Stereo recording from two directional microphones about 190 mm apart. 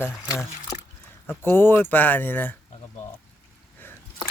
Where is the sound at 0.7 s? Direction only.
40° left (ahead or behind).